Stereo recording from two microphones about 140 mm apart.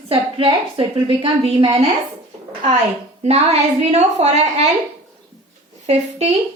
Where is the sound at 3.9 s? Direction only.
50° right (ahead or behind).